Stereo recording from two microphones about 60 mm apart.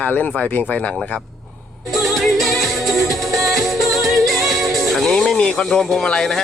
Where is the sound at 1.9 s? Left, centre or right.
Centre.